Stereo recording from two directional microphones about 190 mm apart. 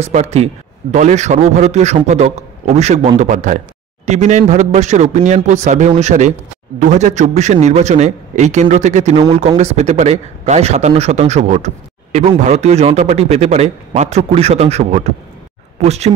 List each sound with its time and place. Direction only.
0.0 s speech: 35° right (ahead or behind)